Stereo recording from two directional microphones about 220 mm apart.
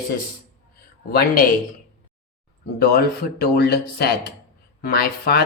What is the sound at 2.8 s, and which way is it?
Speech, 45° left (ahead or behind).